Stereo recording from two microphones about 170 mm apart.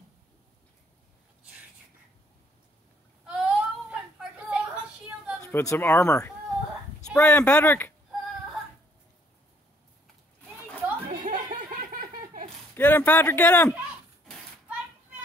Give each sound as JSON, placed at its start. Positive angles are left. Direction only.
{"t": 3.3, "sound": "a sound", "side_deg": -5}
{"t": 5.4, "sound": "speech", "side_deg": 15}
{"t": 7.1, "sound": "speech", "side_deg": 5}
{"t": 11.2, "sound": "laughter", "side_deg": -50}
{"t": 12.7, "sound": "speech", "side_deg": 10}